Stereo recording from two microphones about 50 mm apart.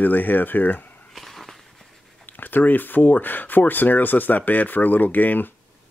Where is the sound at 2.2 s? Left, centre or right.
Left.